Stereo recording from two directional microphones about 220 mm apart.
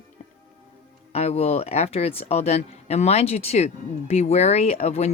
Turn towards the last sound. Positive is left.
turn(degrees=30)  # may be behind; listen again after turning